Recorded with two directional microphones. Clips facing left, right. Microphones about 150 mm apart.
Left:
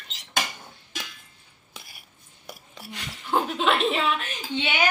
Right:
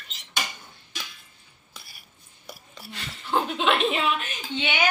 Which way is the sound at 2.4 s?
15° left (ahead or behind).